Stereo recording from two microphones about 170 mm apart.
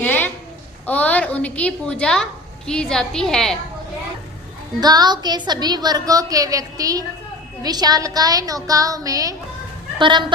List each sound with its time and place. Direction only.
0.0 s a sound: 10° left (ahead or behind)
0.9 s a woman's voice: 10° left (ahead or behind)
4.8 s a woman's voice: 25° right (ahead or behind)